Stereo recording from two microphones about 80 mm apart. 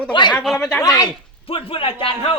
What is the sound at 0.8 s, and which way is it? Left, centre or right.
Speech, left.